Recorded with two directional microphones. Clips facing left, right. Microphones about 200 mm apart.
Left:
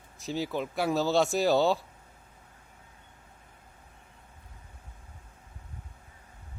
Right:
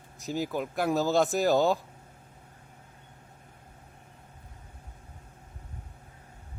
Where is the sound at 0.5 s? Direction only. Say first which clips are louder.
Right 1 dB; centre (ahead or behind).